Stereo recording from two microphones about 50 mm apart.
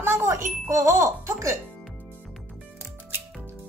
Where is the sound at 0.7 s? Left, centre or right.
Right.